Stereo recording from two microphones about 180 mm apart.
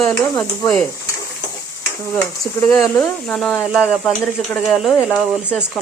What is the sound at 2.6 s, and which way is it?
Speech, 5° left (ahead or behind).